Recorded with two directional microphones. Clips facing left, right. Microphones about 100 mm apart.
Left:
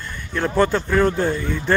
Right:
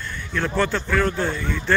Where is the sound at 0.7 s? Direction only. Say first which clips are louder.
Left 4 dB; 25° left (ahead or behind).